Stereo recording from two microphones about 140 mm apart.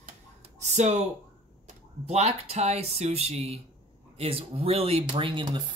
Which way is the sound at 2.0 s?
50° right (ahead or behind).